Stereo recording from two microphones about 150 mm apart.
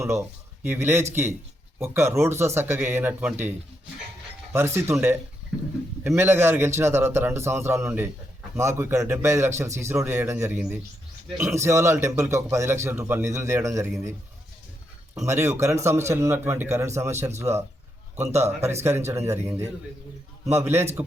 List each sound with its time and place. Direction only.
0.0 s a man's voice: 15° right (ahead or behind)
4.5 s a man's voice: 15° right (ahead or behind)
15.1 s a man's voice: 20° right (ahead or behind)
18.9 s a man's voice: 15° right (ahead or behind)